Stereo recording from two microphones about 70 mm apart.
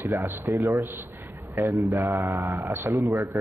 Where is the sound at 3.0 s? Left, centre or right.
Right.